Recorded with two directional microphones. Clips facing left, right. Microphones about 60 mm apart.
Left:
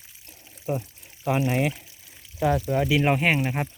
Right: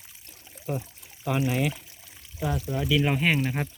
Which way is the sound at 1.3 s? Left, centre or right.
Left.